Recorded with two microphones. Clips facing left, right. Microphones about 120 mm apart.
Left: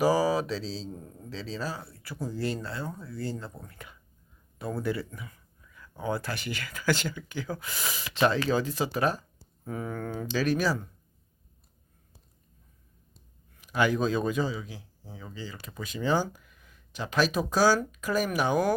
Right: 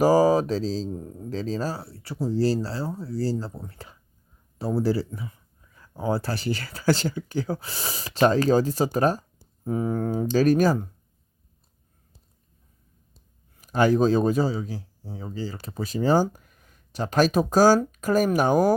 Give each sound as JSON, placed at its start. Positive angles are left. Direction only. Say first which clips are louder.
{"t": 0.0, "sound": "speech", "louder": "right 6 dB", "side_deg": -45}
{"t": 0.9, "sound": "speech", "louder": "right 8 dB", "side_deg": -30}
{"t": 1.3, "sound": "speech", "louder": "right 7 dB", "side_deg": -45}
{"t": 9.6, "sound": "speech", "louder": "right 9 dB", "side_deg": -30}
{"t": 13.6, "sound": "speech", "louder": "right 6 dB", "side_deg": -40}